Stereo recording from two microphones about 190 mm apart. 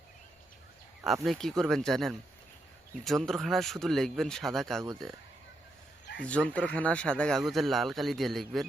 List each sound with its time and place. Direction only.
1.0 s speech: centre (ahead or behind)
6.2 s speech: 5° left (ahead or behind)